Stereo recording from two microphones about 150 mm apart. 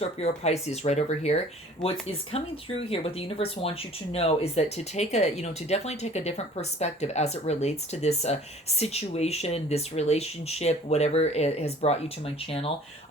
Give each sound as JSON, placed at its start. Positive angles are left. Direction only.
{"t": 0.0, "sound": "speech", "side_deg": 45}